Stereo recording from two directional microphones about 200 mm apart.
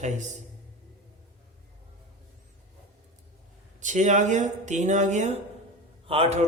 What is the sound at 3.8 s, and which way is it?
A man's voice, 35° right (ahead or behind).